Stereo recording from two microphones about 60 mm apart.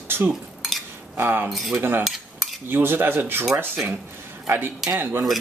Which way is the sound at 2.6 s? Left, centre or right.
Right.